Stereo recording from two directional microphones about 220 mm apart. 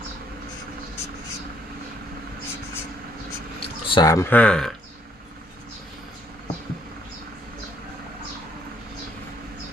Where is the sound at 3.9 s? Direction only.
15° left (ahead or behind).